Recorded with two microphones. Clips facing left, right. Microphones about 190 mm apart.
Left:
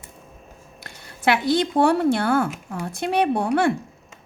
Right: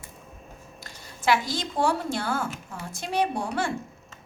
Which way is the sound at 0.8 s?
60° left (ahead or behind).